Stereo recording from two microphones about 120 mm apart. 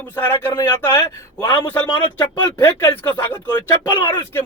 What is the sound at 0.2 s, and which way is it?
Speech, 25° left (ahead or behind).